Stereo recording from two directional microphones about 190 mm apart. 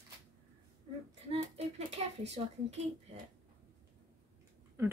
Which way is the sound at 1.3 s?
35° right (ahead or behind).